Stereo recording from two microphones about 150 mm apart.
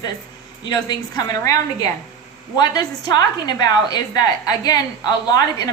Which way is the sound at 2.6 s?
25° left (ahead or behind).